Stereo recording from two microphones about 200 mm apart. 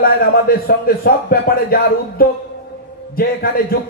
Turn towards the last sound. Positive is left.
turn(degrees=50)  # may be behind; listen again after turning